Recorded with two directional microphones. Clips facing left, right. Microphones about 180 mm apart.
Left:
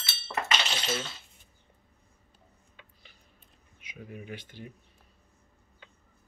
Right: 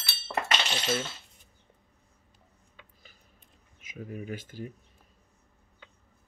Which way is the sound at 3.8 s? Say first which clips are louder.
Right 5 dB; 45° right (ahead or behind).